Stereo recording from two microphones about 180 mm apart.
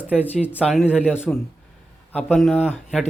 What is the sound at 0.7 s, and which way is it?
Speech, 5° right (ahead or behind).